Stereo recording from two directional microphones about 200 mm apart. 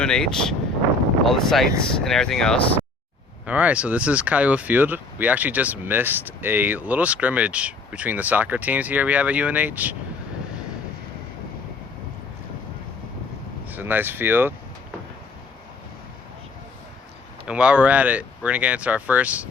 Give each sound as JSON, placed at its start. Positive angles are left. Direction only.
{"t": 0.0, "sound": "speech", "side_deg": 5}
{"t": 3.4, "sound": "speech", "side_deg": -5}
{"t": 13.7, "sound": "speech", "side_deg": -10}
{"t": 17.4, "sound": "speech", "side_deg": -5}